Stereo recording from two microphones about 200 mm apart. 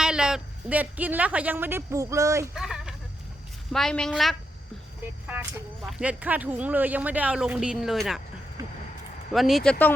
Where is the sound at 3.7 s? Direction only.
Centre (ahead or behind).